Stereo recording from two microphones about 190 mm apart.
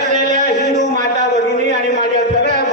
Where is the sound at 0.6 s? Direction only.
60° left (ahead or behind).